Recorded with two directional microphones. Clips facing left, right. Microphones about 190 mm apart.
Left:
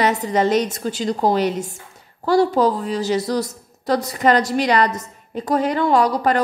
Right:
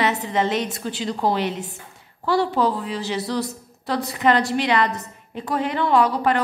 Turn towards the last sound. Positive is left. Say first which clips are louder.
# left 2 dB
turn(degrees=40)  # may be behind; listen again after turning